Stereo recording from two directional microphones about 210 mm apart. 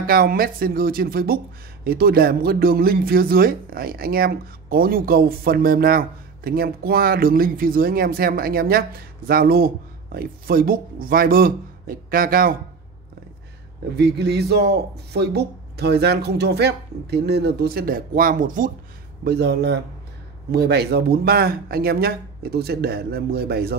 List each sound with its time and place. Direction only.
0.0 s speech: 45° right (ahead or behind)
13.9 s speech: 50° right (ahead or behind)